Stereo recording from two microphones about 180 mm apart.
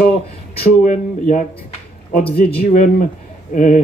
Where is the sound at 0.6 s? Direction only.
50° left (ahead or behind).